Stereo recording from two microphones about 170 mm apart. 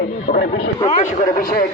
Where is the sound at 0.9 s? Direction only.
50° left (ahead or behind).